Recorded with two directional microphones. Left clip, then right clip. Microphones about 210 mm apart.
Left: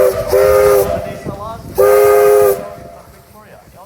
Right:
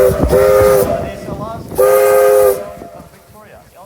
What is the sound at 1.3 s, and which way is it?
Steam whistle, 55° left (ahead or behind).